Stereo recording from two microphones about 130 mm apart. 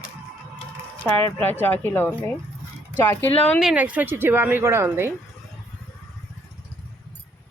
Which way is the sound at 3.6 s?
5° right (ahead or behind).